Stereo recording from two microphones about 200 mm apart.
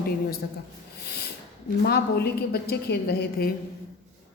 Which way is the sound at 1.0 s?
55° left (ahead or behind).